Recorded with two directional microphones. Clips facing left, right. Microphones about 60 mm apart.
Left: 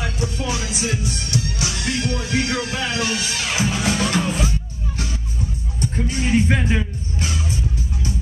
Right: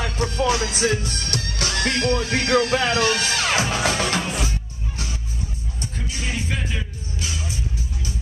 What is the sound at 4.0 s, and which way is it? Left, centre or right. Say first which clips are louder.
Music: left 2 dB; right.